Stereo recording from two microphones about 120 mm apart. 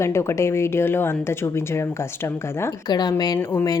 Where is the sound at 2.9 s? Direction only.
35° left (ahead or behind).